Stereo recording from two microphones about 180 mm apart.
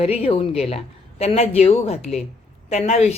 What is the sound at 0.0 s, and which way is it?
Speech, 35° left (ahead or behind).